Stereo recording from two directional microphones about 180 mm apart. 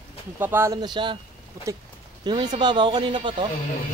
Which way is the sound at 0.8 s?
25° right (ahead or behind).